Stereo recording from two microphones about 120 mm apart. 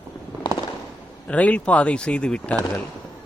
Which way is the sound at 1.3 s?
10° left (ahead or behind).